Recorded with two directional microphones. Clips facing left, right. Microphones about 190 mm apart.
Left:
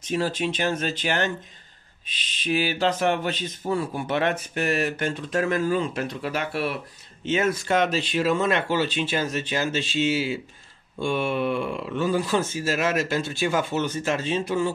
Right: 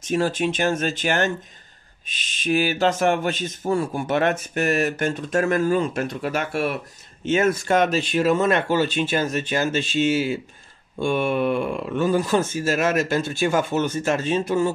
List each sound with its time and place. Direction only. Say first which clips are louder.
0.0 s speech: right 4 dB; 50° right (ahead or behind)